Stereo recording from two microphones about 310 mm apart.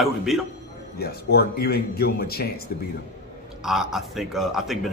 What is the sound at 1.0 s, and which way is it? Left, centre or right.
A man's voice, left.